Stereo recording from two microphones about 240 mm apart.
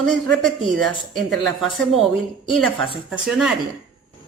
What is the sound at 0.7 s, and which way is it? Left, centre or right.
Speech, centre.